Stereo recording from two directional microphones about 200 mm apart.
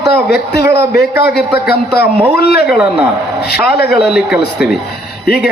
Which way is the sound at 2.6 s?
5° right (ahead or behind).